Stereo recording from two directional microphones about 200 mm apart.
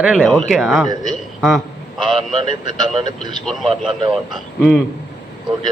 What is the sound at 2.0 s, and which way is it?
Speech, 25° right (ahead or behind).